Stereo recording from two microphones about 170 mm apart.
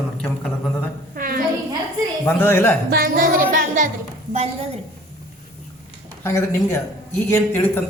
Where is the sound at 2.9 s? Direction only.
55° right (ahead or behind).